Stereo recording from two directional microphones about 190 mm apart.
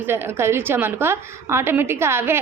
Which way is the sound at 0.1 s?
10° right (ahead or behind).